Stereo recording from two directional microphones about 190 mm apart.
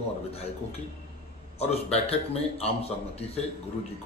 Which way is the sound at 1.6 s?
30° left (ahead or behind).